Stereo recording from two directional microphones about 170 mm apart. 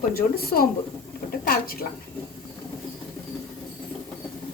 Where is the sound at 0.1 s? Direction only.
65° left (ahead or behind).